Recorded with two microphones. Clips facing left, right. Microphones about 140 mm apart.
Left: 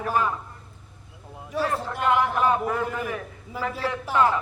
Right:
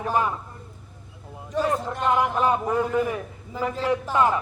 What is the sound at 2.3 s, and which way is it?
A man's voice, 15° right (ahead or behind).